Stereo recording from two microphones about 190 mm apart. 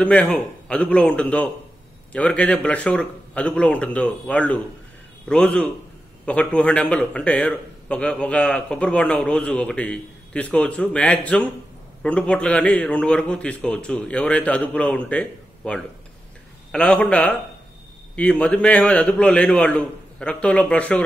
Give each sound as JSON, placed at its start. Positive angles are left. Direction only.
{"t": 0.0, "sound": "a man's voice", "side_deg": 5}